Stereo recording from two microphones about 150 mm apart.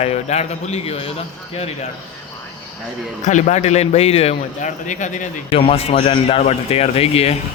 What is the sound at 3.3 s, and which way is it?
A man's voice, 55° left (ahead or behind).